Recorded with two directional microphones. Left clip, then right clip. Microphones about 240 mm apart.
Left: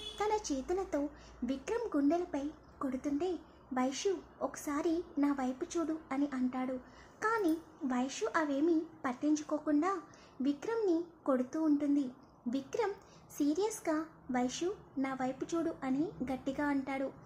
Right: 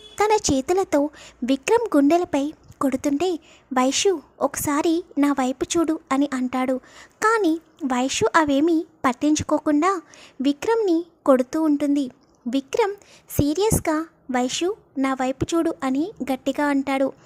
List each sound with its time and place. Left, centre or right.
0.2 s a woman's voice: right